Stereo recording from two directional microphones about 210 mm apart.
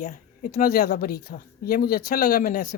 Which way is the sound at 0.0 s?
40° left (ahead or behind).